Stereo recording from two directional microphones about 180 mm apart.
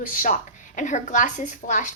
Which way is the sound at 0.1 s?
50° left (ahead or behind).